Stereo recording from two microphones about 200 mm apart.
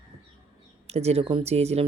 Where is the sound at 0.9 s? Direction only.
30° right (ahead or behind).